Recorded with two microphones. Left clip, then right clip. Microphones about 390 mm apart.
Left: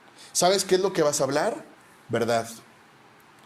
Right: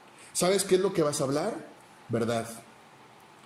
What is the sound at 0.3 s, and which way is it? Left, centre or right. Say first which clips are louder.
A man's voice: left 4 dB; centre.